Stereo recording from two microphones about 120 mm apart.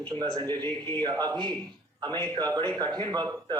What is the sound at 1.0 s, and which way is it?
A man's voice, 35° right (ahead or behind).